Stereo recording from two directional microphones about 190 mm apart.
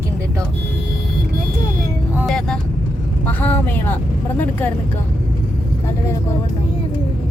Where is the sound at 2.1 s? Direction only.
Centre (ahead or behind).